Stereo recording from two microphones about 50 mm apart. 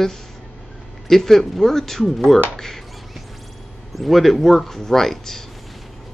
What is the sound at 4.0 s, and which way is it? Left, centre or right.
Speech, centre.